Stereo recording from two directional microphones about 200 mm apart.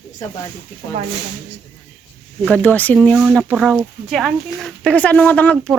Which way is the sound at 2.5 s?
5° left (ahead or behind).